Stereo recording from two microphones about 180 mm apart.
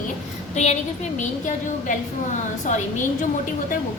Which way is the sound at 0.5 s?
40° left (ahead or behind).